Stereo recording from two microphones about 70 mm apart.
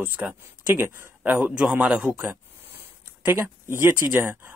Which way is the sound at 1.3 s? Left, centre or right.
Centre.